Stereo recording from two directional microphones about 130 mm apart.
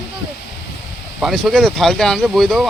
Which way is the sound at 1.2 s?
Centre (ahead or behind).